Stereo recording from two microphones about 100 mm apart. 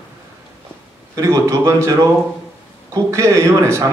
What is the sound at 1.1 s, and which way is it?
A man's voice, 30° right (ahead or behind).